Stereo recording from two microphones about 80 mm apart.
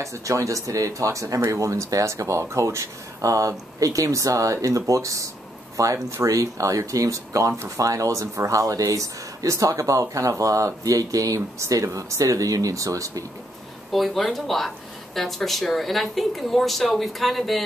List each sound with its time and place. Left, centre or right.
0.0 s speech: right
13.9 s speech: centre